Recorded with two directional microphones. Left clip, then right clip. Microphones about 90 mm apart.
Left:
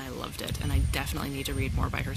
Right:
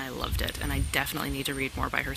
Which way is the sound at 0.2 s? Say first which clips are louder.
Right 3 dB; 25° left (ahead or behind).